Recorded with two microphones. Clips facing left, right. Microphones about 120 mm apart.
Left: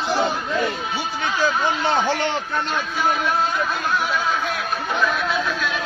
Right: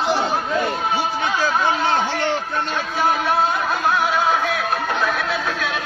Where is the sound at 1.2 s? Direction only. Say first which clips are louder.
Left 1 dB; 90° right.